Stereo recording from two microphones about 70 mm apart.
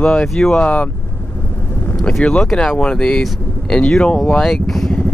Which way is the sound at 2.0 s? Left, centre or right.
Centre.